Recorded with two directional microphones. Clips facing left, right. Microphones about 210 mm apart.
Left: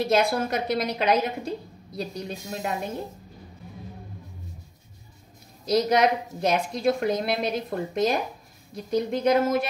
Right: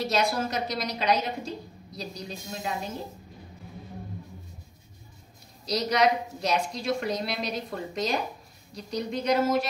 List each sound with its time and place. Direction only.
0.1 s a woman's voice: 55° left (ahead or behind)
5.7 s a woman's voice: 50° left (ahead or behind)